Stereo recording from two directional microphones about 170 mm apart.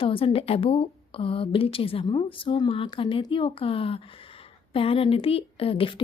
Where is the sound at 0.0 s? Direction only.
30° left (ahead or behind).